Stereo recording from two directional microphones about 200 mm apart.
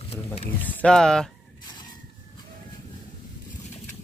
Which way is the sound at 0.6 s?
5° left (ahead or behind).